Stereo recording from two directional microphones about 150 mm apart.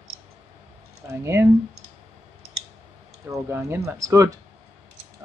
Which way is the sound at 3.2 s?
20° right (ahead or behind).